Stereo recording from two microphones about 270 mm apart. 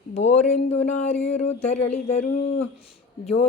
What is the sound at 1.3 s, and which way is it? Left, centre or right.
Speech, left.